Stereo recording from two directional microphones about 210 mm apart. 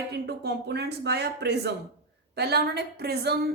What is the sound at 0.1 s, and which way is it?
A woman's voice, 50° right (ahead or behind).